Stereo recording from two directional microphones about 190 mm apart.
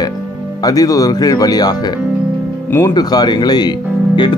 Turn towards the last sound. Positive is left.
turn(degrees=25)  # may be behind; listen again after turning